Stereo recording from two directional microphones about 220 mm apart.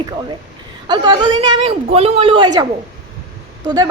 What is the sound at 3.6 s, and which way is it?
Speech, 20° right (ahead or behind).